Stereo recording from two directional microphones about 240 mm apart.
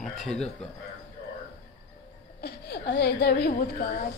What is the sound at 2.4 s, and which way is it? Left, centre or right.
A woman's voice, left.